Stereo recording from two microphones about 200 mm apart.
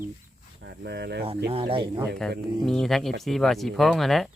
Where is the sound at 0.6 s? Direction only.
55° right (ahead or behind).